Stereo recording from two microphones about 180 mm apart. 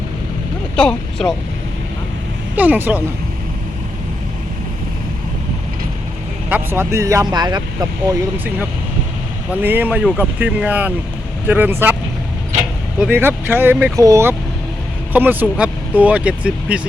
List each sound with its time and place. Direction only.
0.8 s speech: 5° left (ahead or behind)
2.6 s speech: 10° right (ahead or behind)
6.5 s speech: 10° right (ahead or behind)
9.6 s speech: 10° right (ahead or behind)
13.0 s speech: 10° right (ahead or behind)